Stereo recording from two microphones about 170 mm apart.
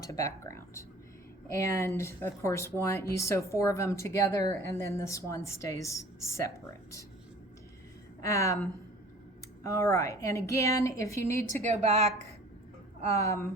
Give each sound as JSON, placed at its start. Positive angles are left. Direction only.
{"t": 0.0, "sound": "a woman's voice", "side_deg": 20}
{"t": 8.2, "sound": "a woman's voice", "side_deg": 20}
{"t": 9.6, "sound": "a woman's voice", "side_deg": 20}
{"t": 11.6, "sound": "speech", "side_deg": -40}
{"t": 13.1, "sound": "a woman's voice", "side_deg": 20}